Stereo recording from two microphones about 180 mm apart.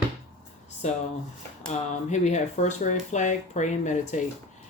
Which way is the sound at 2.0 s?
40° left (ahead or behind).